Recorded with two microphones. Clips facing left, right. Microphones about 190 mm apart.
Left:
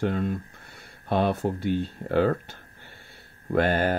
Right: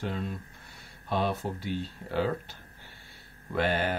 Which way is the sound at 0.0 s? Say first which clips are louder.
Left 8 dB; 55° left (ahead or behind).